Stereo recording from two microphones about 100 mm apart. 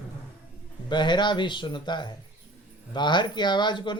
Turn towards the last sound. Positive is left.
turn(degrees=50)  # may be behind; listen again after turning